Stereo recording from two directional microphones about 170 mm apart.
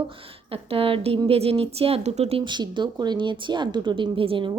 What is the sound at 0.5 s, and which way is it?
Speech, 35° right (ahead or behind).